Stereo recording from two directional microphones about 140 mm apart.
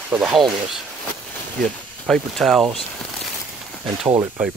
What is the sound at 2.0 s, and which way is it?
Speech, centre (ahead or behind).